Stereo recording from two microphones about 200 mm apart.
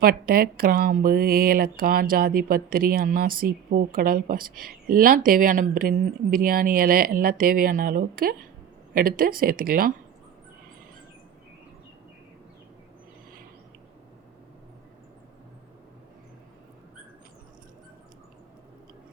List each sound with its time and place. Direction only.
0.0 s speech: 50° right (ahead or behind)